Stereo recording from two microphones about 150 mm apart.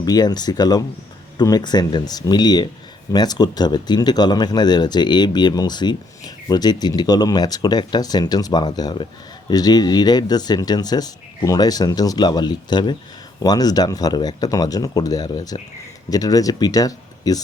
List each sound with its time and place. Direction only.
0.0 s speech: 25° left (ahead or behind)